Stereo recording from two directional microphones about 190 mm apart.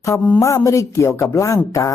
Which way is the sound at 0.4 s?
15° left (ahead or behind).